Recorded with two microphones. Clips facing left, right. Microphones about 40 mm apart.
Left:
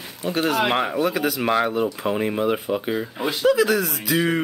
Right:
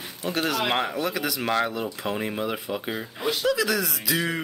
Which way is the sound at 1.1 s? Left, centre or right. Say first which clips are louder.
Left 5 dB; left.